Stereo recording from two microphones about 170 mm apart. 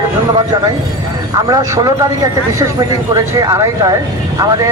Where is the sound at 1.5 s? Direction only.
20° right (ahead or behind).